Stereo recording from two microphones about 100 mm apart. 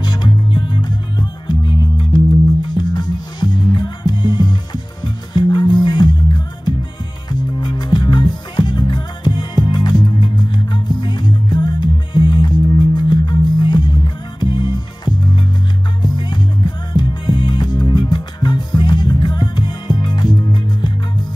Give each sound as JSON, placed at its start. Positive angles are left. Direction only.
{"t": 0.0, "sound": "music", "side_deg": 50}